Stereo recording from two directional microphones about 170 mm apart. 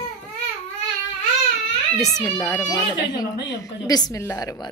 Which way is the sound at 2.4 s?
20° left (ahead or behind).